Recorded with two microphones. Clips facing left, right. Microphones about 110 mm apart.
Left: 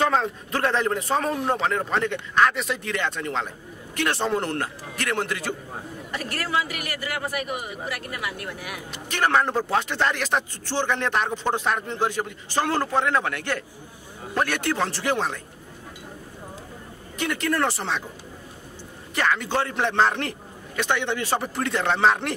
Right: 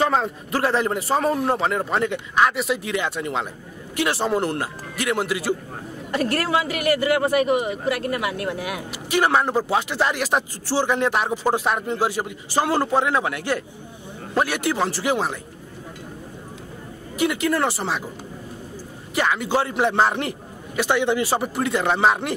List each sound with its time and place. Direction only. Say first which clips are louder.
0.0 s a man's voice: right 1 dB; 5° right (ahead or behind)
6.1 s speech: right 6 dB; 70° right (ahead or behind); by 8.8 s 90° right
8.9 s a man's voice: right 2 dB; 10° right (ahead or behind)
17.2 s a man's voice: right 3 dB; 5° right (ahead or behind)
19.1 s a man's voice: right 2 dB; 5° right (ahead or behind)